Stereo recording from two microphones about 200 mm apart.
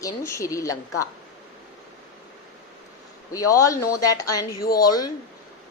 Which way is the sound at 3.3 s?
15° left (ahead or behind).